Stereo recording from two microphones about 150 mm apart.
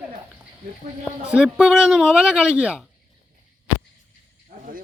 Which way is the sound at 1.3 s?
5° right (ahead or behind).